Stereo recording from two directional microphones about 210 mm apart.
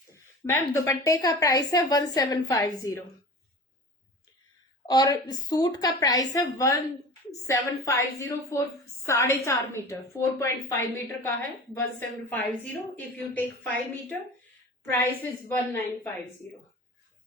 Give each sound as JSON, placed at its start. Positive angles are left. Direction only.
{"t": 0.1, "sound": "a woman's voice", "side_deg": 15}
{"t": 4.9, "sound": "a woman's voice", "side_deg": 20}